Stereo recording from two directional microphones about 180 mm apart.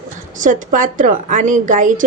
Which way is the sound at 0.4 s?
45° right (ahead or behind).